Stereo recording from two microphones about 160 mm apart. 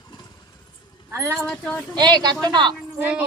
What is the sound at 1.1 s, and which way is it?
Speech, 15° right (ahead or behind).